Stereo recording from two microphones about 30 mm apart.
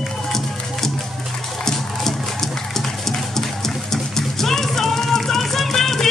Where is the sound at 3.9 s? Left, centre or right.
Centre.